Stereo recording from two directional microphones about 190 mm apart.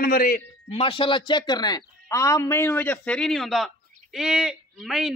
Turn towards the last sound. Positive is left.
turn(degrees=0)  # may be behind; listen again after turning